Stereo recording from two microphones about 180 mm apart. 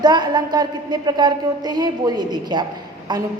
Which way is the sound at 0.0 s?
25° right (ahead or behind).